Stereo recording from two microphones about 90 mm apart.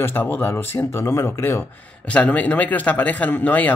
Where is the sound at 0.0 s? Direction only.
20° left (ahead or behind).